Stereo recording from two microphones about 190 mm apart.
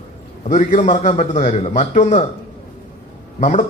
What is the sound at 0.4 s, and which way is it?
A man's voice, 40° left (ahead or behind).